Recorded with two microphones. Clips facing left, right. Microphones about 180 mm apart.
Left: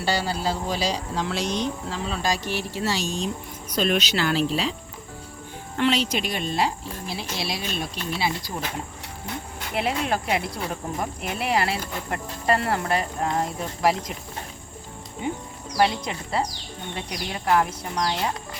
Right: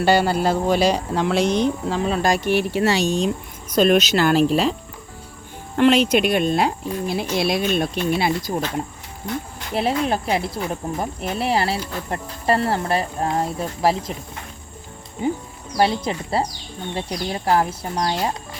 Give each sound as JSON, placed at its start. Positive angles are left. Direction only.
{"t": 0.0, "sound": "speech", "side_deg": -55}
{"t": 3.7, "sound": "speech", "side_deg": -45}
{"t": 5.7, "sound": "speech", "side_deg": -55}
{"t": 8.5, "sound": "speech", "side_deg": -40}
{"t": 9.7, "sound": "speech", "side_deg": -30}
{"t": 15.8, "sound": "speech", "side_deg": -30}